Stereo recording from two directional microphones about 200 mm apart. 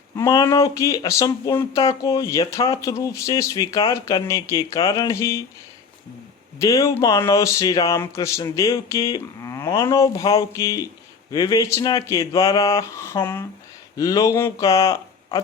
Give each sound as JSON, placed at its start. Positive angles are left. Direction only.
{"t": 0.2, "sound": "speech", "side_deg": 15}
{"t": 6.6, "sound": "speech", "side_deg": 15}